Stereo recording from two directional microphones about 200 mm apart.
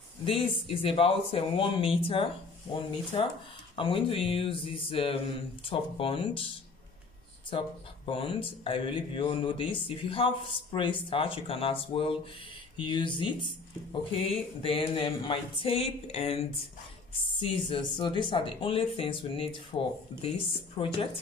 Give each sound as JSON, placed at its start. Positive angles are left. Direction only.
{"t": 0.2, "sound": "speech", "side_deg": 30}
{"t": 7.5, "sound": "speech", "side_deg": 25}